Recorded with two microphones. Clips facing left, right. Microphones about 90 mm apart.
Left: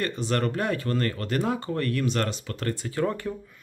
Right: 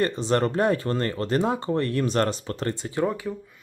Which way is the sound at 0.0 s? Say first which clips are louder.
Right 4 dB; 30° right (ahead or behind).